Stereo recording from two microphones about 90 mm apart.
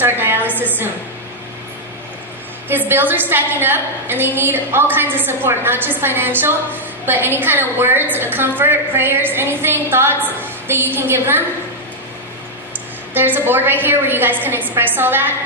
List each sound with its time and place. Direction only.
0.0 s a sound: 25° right (ahead or behind)
2.6 s a woman's voice: 20° right (ahead or behind)
13.1 s a woman's voice: 20° right (ahead or behind)